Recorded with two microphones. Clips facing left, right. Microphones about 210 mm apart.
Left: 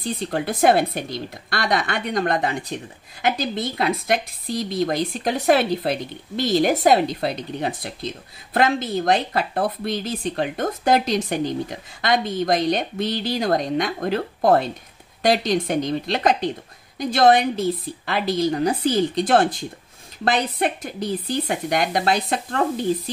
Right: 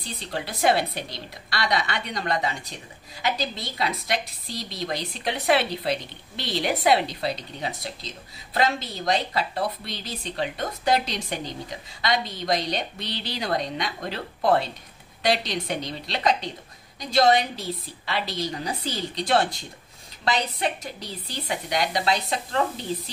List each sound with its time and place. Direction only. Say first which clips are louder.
0.0 s a woman's voice: left 8 dB; 50° left (ahead or behind)